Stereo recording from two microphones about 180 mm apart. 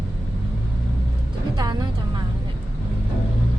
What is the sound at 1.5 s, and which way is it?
Music, 25° right (ahead or behind).